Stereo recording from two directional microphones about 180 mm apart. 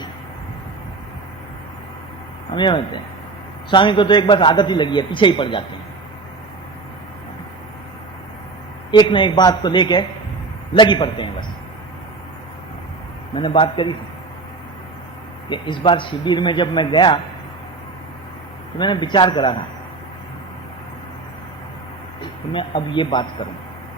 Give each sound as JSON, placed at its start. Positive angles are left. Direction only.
{"t": 2.5, "sound": "a man's voice", "side_deg": 25}
{"t": 8.9, "sound": "a man's voice", "side_deg": 25}
{"t": 13.3, "sound": "a man's voice", "side_deg": 25}
{"t": 15.4, "sound": "a man's voice", "side_deg": 25}
{"t": 18.8, "sound": "a man's voice", "side_deg": 25}
{"t": 22.5, "sound": "a man's voice", "side_deg": 25}